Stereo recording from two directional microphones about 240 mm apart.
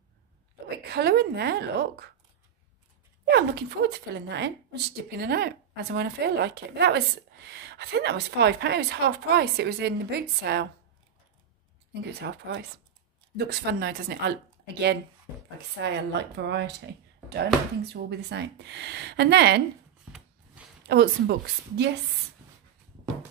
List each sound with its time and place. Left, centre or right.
0.8 s speech: right
3.3 s speech: right
12.2 s speech: right
20.1 s a sound: centre
20.8 s speech: right